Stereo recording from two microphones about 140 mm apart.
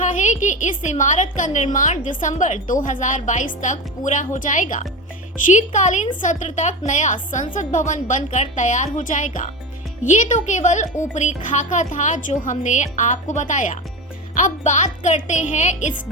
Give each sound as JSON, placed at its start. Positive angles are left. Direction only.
{"t": 0.0, "sound": "a woman's voice", "side_deg": 65}